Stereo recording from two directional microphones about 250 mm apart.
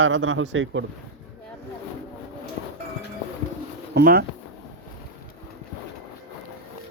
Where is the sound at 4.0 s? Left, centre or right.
Right.